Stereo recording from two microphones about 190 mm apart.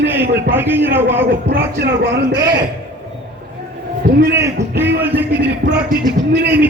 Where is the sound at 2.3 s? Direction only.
20° right (ahead or behind).